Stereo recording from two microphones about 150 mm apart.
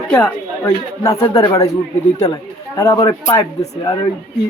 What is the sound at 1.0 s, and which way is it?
A man's voice, 20° left (ahead or behind).